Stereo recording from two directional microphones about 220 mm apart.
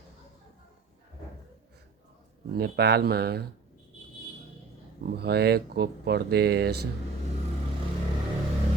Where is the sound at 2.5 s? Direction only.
50° right (ahead or behind).